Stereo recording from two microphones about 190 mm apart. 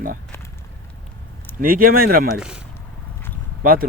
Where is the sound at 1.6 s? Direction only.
50° right (ahead or behind).